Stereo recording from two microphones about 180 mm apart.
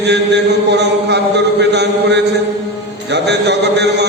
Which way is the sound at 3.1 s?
70° right (ahead or behind).